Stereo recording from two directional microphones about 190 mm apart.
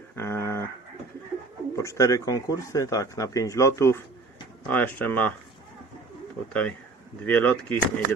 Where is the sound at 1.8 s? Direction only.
15° left (ahead or behind).